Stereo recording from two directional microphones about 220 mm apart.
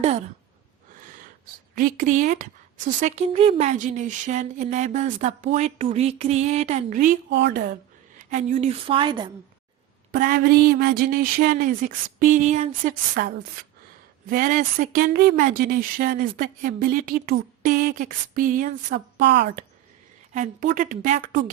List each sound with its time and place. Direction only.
1.0 s a sound: 35° right (ahead or behind)
1.7 s a woman's voice: 40° right (ahead or behind)
7.3 s a woman's voice: 50° right (ahead or behind)
8.2 s speech: 35° right (ahead or behind)
10.1 s a woman's voice: 40° right (ahead or behind)
18.9 s a woman's voice: 50° right (ahead or behind)
20.3 s a woman's voice: 35° right (ahead or behind)